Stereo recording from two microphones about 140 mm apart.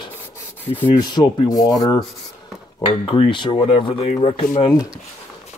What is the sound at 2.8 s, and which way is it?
Speech, 40° left (ahead or behind).